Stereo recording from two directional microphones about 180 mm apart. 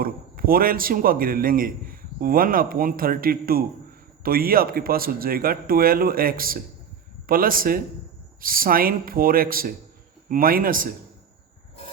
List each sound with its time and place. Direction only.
0.0 s a man's voice: 55° right (ahead or behind)